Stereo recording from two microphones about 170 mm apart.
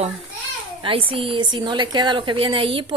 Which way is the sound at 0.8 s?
30° right (ahead or behind).